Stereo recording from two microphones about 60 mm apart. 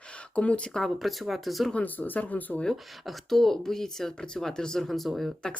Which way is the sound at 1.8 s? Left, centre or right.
Left.